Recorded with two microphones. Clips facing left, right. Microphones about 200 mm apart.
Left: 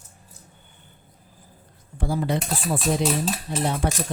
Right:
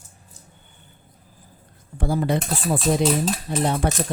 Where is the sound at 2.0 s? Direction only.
55° right (ahead or behind).